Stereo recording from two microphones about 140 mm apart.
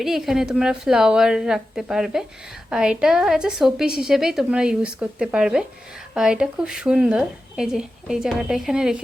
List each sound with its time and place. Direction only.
0.0 s a woman's voice: centre (ahead or behind)